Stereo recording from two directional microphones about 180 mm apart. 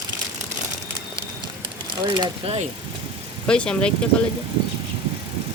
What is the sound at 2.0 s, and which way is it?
Speech, 25° right (ahead or behind).